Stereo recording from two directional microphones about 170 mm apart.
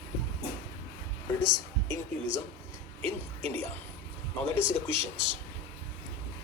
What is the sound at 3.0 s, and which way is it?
Speech, 35° right (ahead or behind).